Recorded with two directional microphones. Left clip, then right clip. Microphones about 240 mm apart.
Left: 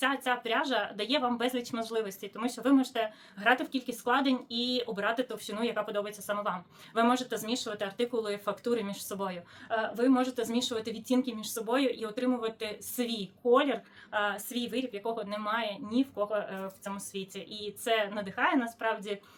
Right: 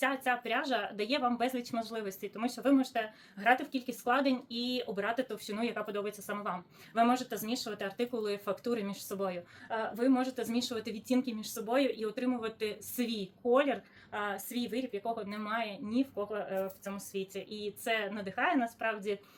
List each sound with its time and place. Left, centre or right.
0.0 s speech: centre